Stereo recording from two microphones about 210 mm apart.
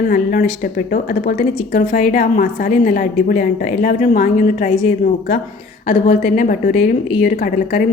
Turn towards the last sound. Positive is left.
turn(degrees=40)  # may be behind; listen again after turning